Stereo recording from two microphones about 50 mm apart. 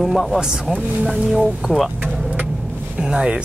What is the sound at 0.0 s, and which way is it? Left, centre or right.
Speech, centre.